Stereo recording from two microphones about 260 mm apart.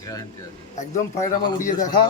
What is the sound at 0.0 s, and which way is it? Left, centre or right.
Speech, centre.